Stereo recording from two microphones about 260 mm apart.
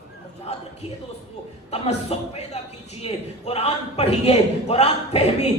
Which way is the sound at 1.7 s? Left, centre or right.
Left.